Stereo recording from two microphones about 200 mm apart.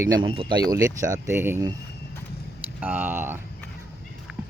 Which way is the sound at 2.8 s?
10° right (ahead or behind).